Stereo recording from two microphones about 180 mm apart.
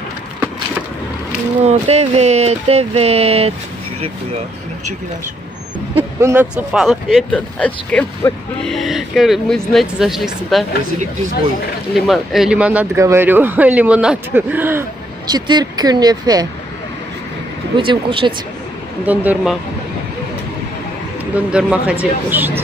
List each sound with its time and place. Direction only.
1.6 s speech: 35° right (ahead or behind)
5.9 s speech: 10° right (ahead or behind)
11.9 s speech: centre (ahead or behind)
15.2 s speech: 25° right (ahead or behind)
17.7 s speech: 30° right (ahead or behind)
19.0 s speech: 10° right (ahead or behind)
21.4 s speech: 5° right (ahead or behind)